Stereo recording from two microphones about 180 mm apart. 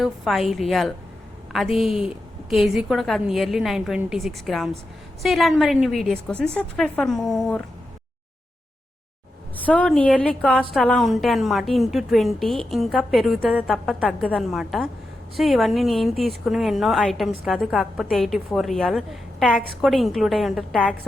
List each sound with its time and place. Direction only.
0.0 s a woman's voice: centre (ahead or behind)
9.6 s a woman's voice: 5° left (ahead or behind)